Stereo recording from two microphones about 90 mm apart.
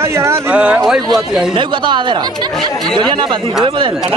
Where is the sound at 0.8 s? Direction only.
5° left (ahead or behind).